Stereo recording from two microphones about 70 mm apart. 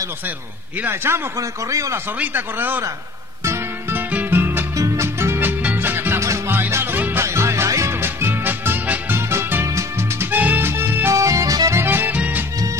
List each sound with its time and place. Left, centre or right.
0.8 s a man's voice: right
1.7 s a man's voice: right
2.1 s speech: right
4.1 s music: right
4.7 s music: right
6.2 s music: right
6.5 s music: right
9.1 s music: right
11.7 s music: right